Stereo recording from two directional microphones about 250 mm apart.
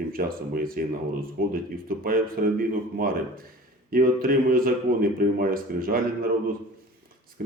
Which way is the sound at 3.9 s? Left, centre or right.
Right.